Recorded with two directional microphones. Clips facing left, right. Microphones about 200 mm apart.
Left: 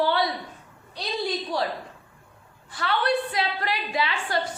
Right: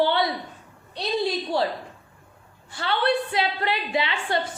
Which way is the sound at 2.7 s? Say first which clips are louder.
Right 1 dB; 30° right (ahead or behind).